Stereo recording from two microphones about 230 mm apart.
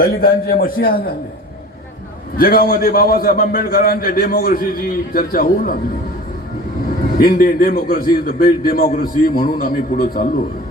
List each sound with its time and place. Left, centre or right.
0.0 s a man's voice: left
2.4 s a man's voice: left
7.2 s a man's voice: left